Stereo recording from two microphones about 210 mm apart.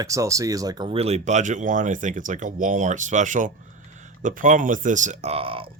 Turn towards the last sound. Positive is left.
turn(degrees=-25)  # may be behind; listen again after turning